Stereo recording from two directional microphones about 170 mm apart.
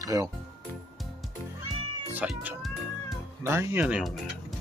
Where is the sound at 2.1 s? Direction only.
10° right (ahead or behind).